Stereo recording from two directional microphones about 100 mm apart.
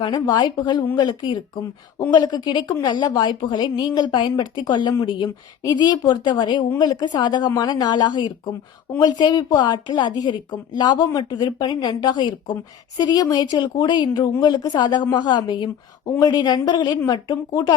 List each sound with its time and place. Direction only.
0.0 s a woman's voice: 50° left (ahead or behind)